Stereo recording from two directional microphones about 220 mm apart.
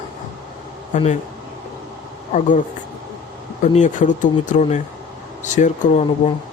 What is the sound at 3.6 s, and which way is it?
Speech, 35° left (ahead or behind).